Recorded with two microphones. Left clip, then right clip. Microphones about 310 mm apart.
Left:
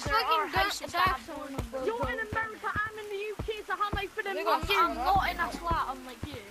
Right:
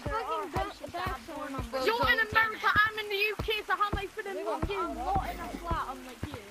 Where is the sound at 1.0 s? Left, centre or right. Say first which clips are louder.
Left 9 dB; left.